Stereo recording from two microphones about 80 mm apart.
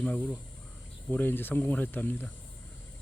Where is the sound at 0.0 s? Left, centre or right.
Centre.